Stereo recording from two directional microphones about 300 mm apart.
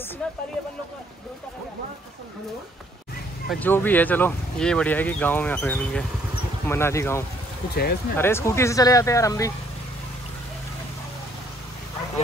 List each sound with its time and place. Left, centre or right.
0.2 s speech: centre
3.4 s speech: centre
7.7 s speech: left
8.2 s speech: centre